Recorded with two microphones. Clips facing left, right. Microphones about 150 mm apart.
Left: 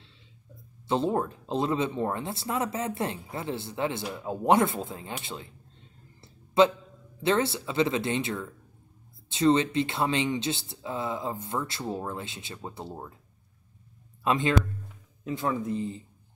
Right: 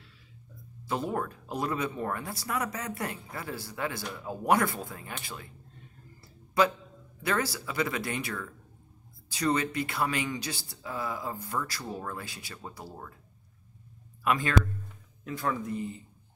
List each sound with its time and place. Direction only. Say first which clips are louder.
0.8 s speech: left 5 dB; 25° left (ahead or behind)
5.2 s a sound: left 4 dB; 25° left (ahead or behind)
7.2 s speech: left 5 dB; 25° left (ahead or behind)
14.2 s a man's voice: left 2 dB; 25° left (ahead or behind)